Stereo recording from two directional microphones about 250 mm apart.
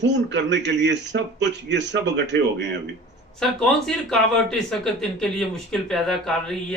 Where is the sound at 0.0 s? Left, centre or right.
Right.